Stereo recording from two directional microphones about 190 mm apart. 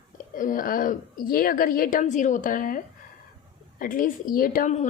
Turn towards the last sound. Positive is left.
turn(degrees=40)  # may be behind; listen again after turning